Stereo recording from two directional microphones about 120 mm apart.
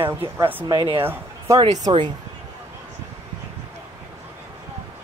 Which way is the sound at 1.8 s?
40° right (ahead or behind).